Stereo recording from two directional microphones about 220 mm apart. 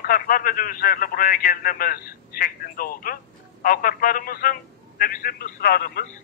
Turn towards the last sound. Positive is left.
turn(degrees=45)  # may be behind; listen again after turning